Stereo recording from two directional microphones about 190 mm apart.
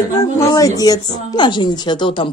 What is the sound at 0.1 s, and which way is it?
A woman's voice, 15° left (ahead or behind).